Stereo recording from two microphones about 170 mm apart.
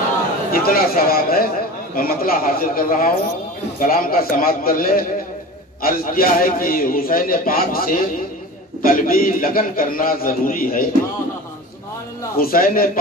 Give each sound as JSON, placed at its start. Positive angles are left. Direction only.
{"t": 0.5, "sound": "a man's voice", "side_deg": 60}
{"t": 12.4, "sound": "a man's voice", "side_deg": 60}